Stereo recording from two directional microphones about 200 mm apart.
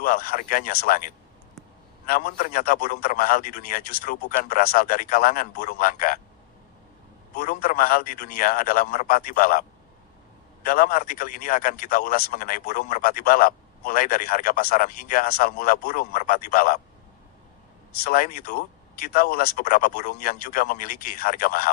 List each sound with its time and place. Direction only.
0.0 s a man's voice: 45° left (ahead or behind)
2.0 s a man's voice: 45° left (ahead or behind)
7.3 s a man's voice: 50° left (ahead or behind)
18.0 s a man's voice: 50° left (ahead or behind)